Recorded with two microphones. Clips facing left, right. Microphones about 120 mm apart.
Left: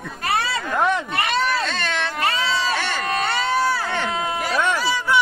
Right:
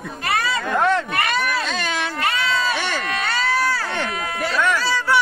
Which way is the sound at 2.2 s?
30° left (ahead or behind).